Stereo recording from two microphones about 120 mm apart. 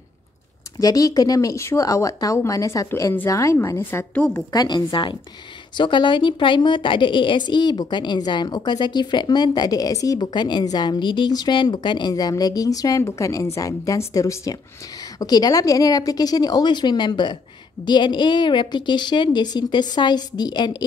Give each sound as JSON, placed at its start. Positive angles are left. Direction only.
{"t": 0.7, "sound": "speech", "side_deg": 30}
{"t": 4.3, "sound": "a woman's voice", "side_deg": 35}